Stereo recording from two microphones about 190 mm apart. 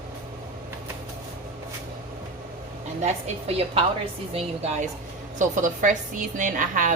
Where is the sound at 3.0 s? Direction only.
35° right (ahead or behind).